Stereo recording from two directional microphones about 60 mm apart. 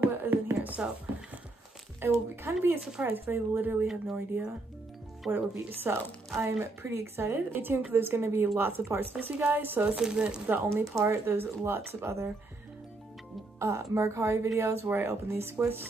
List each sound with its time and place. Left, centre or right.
0.0 s a sound: right
2.0 s speech: right
3.8 s speech: centre
5.2 s speech: centre
5.7 s speech: right
6.3 s a woman's voice: right
9.3 s speech: right
9.8 s speech: centre
10.4 s speech: right
10.9 s speech: right
11.2 s a woman's voice: right
13.6 s a woman's voice: right